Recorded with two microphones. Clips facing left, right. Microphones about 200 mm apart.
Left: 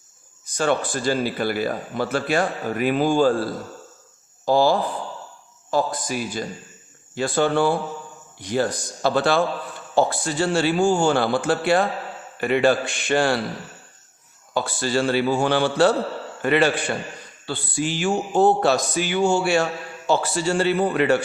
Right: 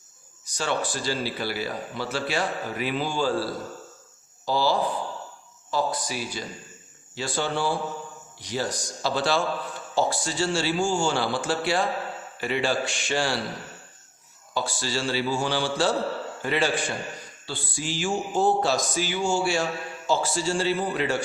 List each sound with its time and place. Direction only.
0.4 s a man's voice: 55° left (ahead or behind)
14.5 s speech: 55° left (ahead or behind)